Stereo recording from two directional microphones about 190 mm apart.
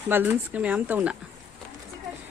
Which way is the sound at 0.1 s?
10° right (ahead or behind).